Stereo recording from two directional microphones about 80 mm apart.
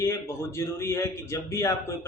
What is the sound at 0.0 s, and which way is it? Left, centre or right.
Speech, left.